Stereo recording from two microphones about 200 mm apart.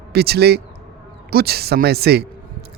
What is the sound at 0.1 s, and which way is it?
A man's voice, 55° right (ahead or behind).